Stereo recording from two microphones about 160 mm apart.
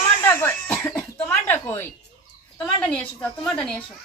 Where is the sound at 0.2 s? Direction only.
15° left (ahead or behind).